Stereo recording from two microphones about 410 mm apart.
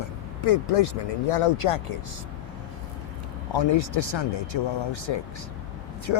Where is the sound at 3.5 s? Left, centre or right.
Left.